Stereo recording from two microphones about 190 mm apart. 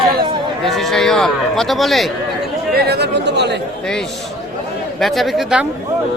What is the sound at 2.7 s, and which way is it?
Chatter, 55° right (ahead or behind).